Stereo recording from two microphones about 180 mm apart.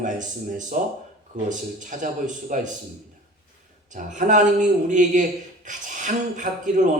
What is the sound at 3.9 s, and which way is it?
Speech, 45° right (ahead or behind).